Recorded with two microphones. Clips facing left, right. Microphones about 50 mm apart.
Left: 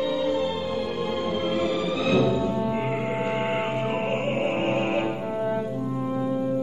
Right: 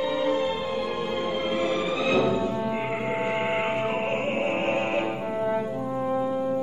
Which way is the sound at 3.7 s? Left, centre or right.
Right.